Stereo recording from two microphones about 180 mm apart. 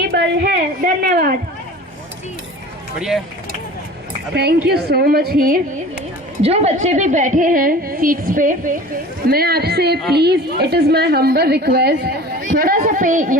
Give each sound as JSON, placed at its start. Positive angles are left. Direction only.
{"t": 0.1, "sound": "a sound", "side_deg": -65}
{"t": 4.4, "sound": "a woman's voice", "side_deg": -65}
{"t": 6.4, "sound": "a woman's voice", "side_deg": -35}
{"t": 9.3, "sound": "a woman's voice", "side_deg": -60}